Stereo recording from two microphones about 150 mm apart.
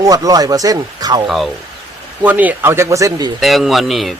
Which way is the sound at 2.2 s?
10° right (ahead or behind).